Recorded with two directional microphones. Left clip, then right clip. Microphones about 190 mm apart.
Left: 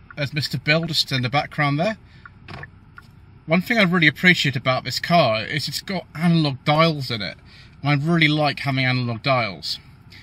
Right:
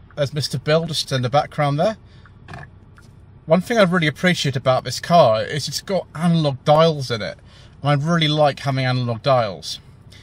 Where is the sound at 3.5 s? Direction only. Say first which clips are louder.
Right 3 dB; 15° right (ahead or behind).